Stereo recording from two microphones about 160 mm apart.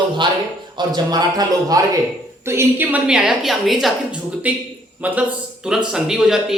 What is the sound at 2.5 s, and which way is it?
Speech, 15° right (ahead or behind).